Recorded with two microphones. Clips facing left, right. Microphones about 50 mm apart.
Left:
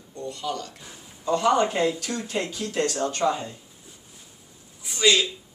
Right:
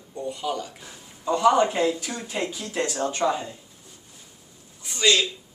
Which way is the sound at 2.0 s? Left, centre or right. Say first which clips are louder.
Left 1 dB; centre.